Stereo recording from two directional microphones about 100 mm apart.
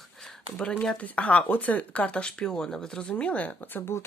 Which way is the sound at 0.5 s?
10° left (ahead or behind).